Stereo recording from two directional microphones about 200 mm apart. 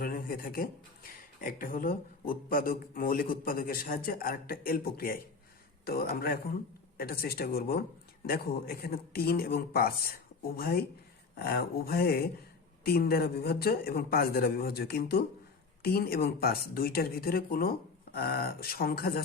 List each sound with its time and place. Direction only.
0.0 s speech: 45° left (ahead or behind)